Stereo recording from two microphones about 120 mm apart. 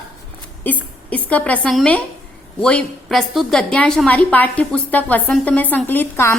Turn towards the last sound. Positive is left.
turn(degrees=20)  # may be behind; listen again after turning